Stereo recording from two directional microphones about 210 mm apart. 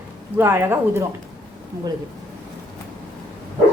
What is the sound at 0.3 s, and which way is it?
Speech, 10° right (ahead or behind).